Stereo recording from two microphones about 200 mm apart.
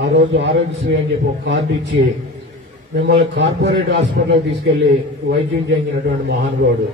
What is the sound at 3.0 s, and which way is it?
A man's voice, 55° right (ahead or behind).